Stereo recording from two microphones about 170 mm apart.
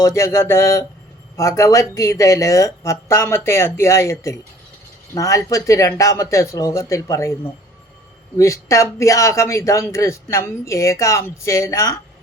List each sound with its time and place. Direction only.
0.0 s speech: 15° left (ahead or behind)